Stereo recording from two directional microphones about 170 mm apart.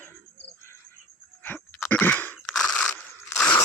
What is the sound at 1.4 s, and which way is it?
Crunch, 10° left (ahead or behind).